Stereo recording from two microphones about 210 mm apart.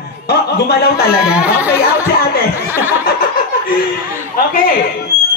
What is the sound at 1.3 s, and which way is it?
Speech, 5° right (ahead or behind).